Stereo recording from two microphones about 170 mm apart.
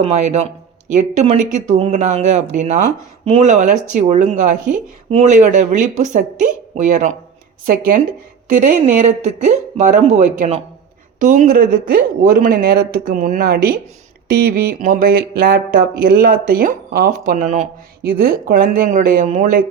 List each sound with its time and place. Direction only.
0.0 s speech: 40° right (ahead or behind); by 14.8 s 65° right (ahead or behind)
14.8 s speech: 50° right (ahead or behind)
18.0 s speech: 60° right (ahead or behind)